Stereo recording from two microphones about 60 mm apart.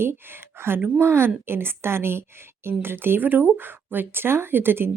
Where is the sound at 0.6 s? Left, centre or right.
Right.